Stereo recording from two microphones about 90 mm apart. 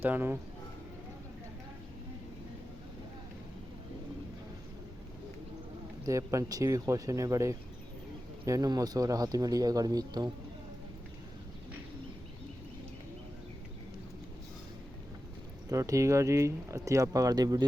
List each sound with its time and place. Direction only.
0.0 s speech: 25° right (ahead or behind)
6.1 s speech: 35° right (ahead or behind)
15.7 s speech: 35° right (ahead or behind)